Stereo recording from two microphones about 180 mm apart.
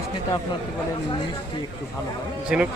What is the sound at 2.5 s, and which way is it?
Speech, 5° right (ahead or behind).